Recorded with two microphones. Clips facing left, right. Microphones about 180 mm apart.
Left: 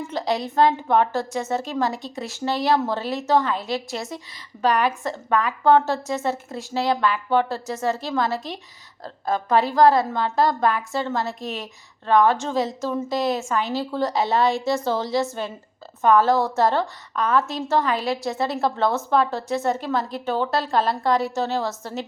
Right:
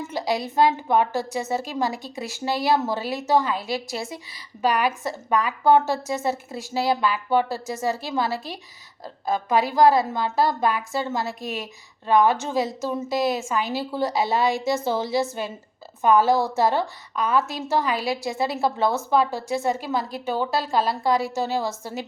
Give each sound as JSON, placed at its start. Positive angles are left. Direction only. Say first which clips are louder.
{"t": 0.0, "sound": "a sound", "louder": "left 1 dB", "side_deg": -10}
{"t": 0.5, "sound": "a woman's voice", "louder": "left 1 dB", "side_deg": -10}
{"t": 9.9, "sound": "a woman's voice", "louder": "left 1 dB", "side_deg": -5}
{"t": 14.4, "sound": "a woman's voice", "louder": "left 1 dB", "side_deg": -15}